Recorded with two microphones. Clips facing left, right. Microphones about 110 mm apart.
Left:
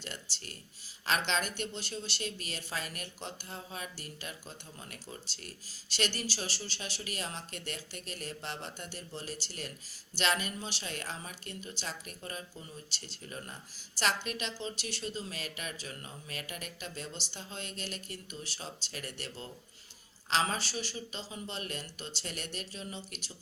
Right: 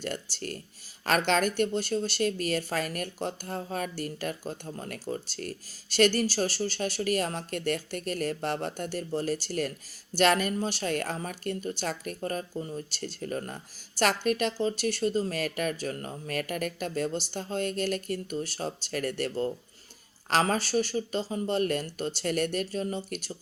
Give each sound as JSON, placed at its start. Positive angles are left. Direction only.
{"t": 0.0, "sound": "speech", "side_deg": -50}